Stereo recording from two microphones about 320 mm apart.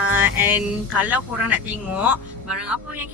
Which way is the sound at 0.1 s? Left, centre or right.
Centre.